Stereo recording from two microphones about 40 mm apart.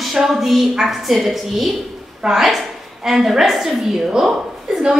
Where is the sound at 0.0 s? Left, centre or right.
Centre.